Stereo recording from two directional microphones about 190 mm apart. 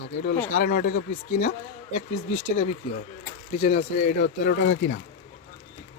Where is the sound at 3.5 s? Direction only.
35° left (ahead or behind).